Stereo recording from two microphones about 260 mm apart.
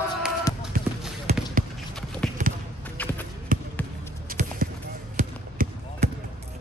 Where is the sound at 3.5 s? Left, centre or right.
Right.